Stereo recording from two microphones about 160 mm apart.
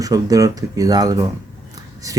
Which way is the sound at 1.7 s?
20° right (ahead or behind).